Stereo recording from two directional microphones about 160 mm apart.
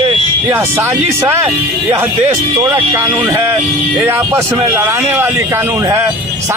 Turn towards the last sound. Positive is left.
turn(degrees=-20)  # may be behind; listen again after turning